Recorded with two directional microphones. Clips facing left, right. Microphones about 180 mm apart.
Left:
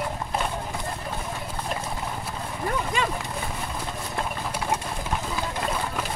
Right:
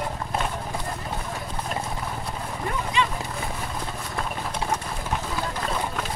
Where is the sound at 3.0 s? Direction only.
45° left (ahead or behind).